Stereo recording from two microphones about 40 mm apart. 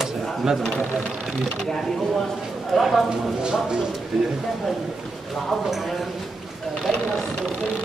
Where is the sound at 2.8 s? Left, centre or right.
Centre.